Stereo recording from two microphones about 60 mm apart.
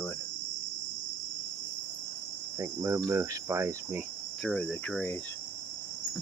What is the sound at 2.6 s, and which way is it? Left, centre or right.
Cricket, right.